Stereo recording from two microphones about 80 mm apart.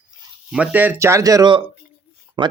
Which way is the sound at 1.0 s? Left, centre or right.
Right.